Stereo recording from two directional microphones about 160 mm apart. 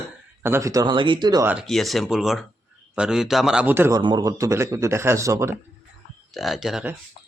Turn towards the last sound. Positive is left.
turn(degrees=-5)  # may be behind; listen again after turning